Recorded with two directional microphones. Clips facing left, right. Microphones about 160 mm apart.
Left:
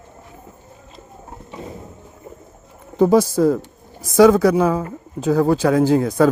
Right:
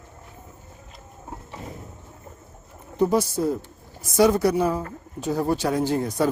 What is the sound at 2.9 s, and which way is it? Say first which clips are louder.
Speech: left 7 dB; 90° left.